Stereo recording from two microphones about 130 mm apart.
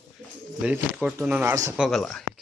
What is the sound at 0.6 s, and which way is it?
Speech, 10° right (ahead or behind).